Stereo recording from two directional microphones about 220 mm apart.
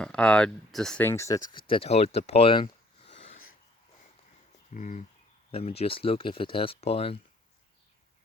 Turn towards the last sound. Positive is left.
turn(degrees=25)  # may be behind; listen again after turning